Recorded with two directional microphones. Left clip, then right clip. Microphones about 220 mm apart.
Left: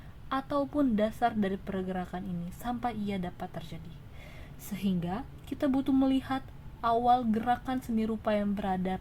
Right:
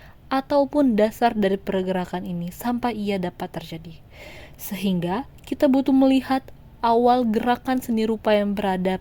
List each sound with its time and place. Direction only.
0.3 s a woman's voice: 35° right (ahead or behind)